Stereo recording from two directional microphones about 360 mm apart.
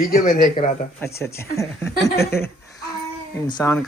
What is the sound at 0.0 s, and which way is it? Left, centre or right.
Speech, left.